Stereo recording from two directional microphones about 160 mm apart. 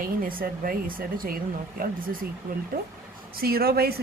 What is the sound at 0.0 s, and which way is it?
Speech, 60° right (ahead or behind).